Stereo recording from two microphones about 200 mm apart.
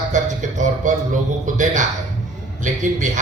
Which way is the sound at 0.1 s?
40° right (ahead or behind).